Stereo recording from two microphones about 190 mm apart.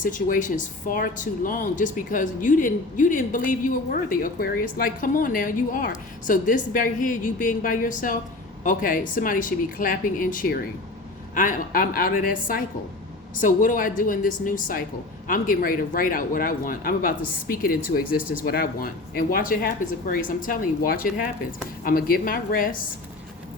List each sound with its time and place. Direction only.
0.0 s speech: 45° left (ahead or behind)